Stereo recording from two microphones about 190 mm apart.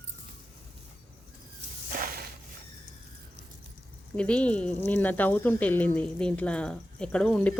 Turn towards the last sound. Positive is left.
turn(degrees=5)  # may be behind; listen again after turning